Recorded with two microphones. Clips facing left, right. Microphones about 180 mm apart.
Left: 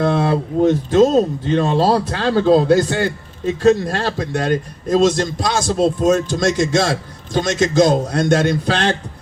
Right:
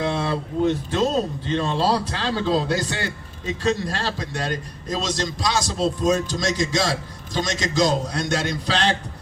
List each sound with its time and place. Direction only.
0.0 s speech: 50° left (ahead or behind)